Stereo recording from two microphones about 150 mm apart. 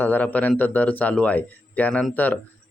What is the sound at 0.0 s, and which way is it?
A man's voice, 10° left (ahead or behind).